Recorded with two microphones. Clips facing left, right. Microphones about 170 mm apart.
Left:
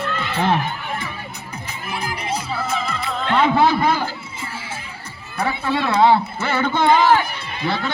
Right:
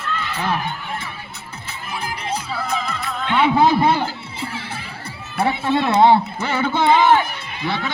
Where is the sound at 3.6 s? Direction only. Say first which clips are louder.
Right 2 dB; 25° right (ahead or behind).